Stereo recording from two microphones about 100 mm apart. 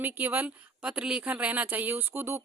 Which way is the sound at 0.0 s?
20° right (ahead or behind).